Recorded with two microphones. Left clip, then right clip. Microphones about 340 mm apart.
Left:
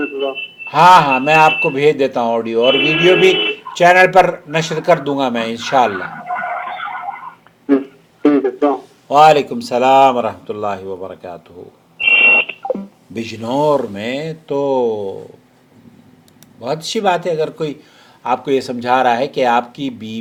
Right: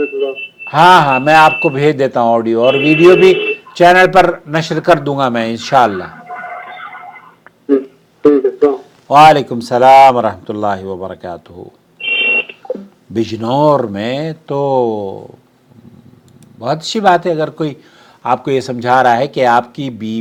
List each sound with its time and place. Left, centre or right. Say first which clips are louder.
0.0 s telephone: right 3 dB; left
0.6 s a man's voice: right 1 dB; right
6.1 s a sound: left 5 dB; left
8.2 s a sound: right 4 dB; left
9.0 s a man's voice: right 3 dB; right
11.9 s smoke detector: left 4 dB; left
13.1 s a man's voice: right 4 dB; right
16.6 s a man's voice: right 3 dB; right